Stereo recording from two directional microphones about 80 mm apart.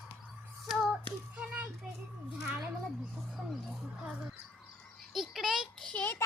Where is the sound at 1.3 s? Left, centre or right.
Centre.